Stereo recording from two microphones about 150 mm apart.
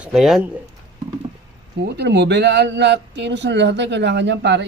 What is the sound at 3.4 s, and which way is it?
Speech, 90° right.